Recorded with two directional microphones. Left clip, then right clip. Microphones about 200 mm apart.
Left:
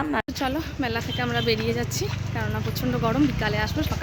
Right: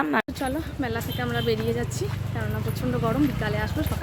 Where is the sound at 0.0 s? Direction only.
20° right (ahead or behind).